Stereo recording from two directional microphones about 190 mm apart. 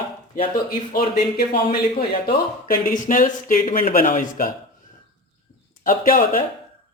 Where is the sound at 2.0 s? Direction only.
50° left (ahead or behind).